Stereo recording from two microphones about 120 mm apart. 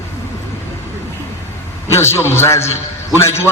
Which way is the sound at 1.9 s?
20° left (ahead or behind).